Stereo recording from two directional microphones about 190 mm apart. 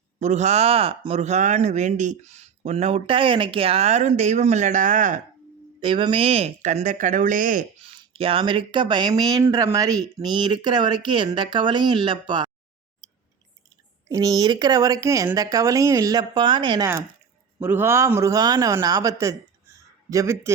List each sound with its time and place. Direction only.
0.2 s speech: 40° right (ahead or behind)
5.8 s speech: 25° right (ahead or behind); by 7.9 s 45° right (ahead or behind)
7.9 s speech: 30° right (ahead or behind)
14.1 s speech: 20° right (ahead or behind)
17.6 s a man's voice: 10° right (ahead or behind)